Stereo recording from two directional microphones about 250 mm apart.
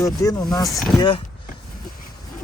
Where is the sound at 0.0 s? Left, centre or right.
Centre.